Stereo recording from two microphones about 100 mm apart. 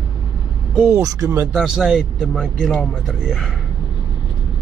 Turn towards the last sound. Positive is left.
turn(degrees=0)  # may be behind; listen again after turning